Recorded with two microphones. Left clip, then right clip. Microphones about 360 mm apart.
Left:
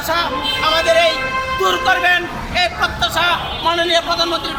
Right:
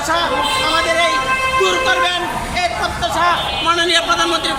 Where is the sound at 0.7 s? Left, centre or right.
Left.